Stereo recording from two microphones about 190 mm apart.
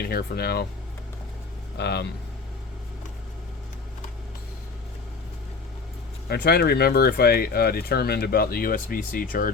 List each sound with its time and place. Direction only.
0.0 s speech: 55° left (ahead or behind)
1.7 s speech: 60° left (ahead or behind)
6.2 s speech: 55° left (ahead or behind)